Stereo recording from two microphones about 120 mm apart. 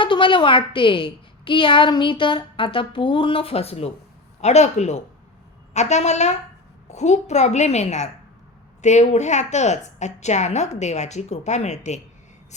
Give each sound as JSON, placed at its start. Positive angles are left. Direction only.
{"t": 0.0, "sound": "a woman's voice", "side_deg": 45}
{"t": 4.4, "sound": "a woman's voice", "side_deg": 70}